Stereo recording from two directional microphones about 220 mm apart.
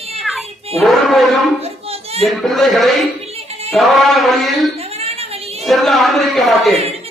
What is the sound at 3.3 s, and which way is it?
Music, 25° right (ahead or behind).